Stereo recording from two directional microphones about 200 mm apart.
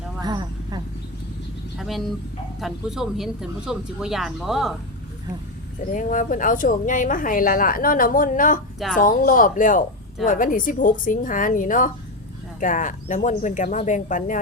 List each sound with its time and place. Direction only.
0.2 s a sound: 20° right (ahead or behind)
1.8 s speech: centre (ahead or behind)
5.8 s a woman's voice: 40° left (ahead or behind)